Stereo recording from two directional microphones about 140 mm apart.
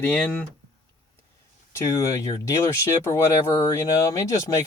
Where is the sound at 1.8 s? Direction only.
20° left (ahead or behind).